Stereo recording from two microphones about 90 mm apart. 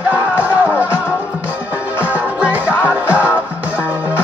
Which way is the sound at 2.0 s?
20° right (ahead or behind).